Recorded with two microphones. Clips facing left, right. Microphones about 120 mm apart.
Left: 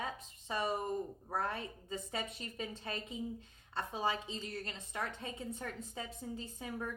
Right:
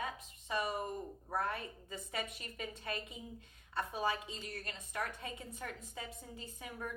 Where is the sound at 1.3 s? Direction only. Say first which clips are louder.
Even; 30° left (ahead or behind).